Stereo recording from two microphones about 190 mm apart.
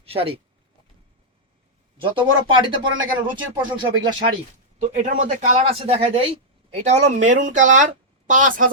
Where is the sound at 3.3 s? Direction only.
25° right (ahead or behind).